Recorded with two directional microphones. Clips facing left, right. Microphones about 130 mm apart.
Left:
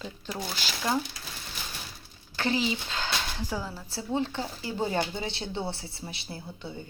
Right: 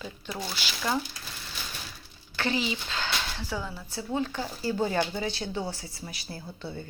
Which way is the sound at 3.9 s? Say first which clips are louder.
Left 1 dB; 30° left (ahead or behind).